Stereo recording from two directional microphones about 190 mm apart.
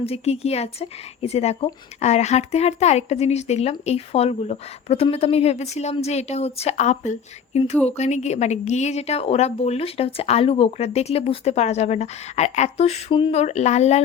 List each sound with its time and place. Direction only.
0.0 s speech: 30° left (ahead or behind)